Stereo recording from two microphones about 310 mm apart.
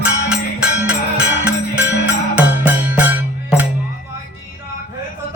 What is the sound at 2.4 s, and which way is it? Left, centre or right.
Music, centre.